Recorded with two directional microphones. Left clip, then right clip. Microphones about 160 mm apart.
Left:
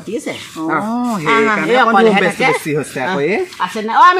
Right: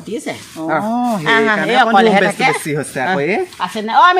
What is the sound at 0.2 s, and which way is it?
Speech, 30° right (ahead or behind).